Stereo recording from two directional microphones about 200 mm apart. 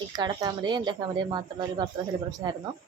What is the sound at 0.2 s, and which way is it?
Speech, 20° right (ahead or behind).